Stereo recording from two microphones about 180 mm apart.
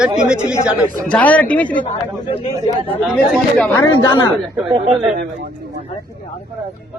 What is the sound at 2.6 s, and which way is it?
Speech, 20° right (ahead or behind).